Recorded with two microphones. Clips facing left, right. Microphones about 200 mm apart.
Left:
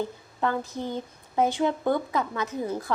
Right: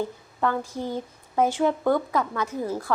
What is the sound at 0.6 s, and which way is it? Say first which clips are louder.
Speech: right 2 dB; 10° right (ahead or behind).